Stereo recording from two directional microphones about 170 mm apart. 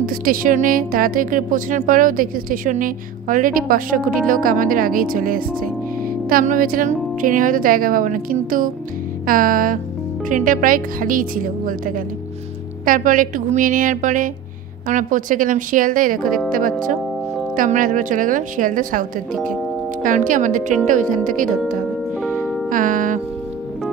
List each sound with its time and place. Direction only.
0.0 s speech: 55° right (ahead or behind)
9.2 s music: 55° right (ahead or behind)
10.3 s speech: 50° right (ahead or behind)
12.8 s speech: 50° right (ahead or behind)
17.6 s speech: 50° right (ahead or behind)
22.7 s music: 50° right (ahead or behind)